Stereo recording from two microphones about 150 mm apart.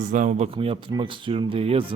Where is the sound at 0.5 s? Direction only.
40° right (ahead or behind).